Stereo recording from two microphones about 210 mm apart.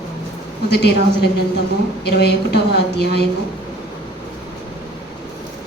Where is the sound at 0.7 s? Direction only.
50° left (ahead or behind).